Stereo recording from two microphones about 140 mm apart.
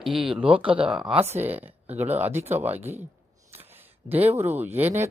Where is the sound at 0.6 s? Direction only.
40° right (ahead or behind).